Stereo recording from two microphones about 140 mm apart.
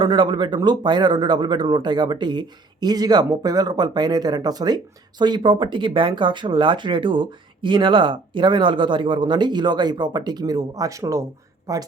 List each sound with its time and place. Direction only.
0.0 s speech: 35° right (ahead or behind)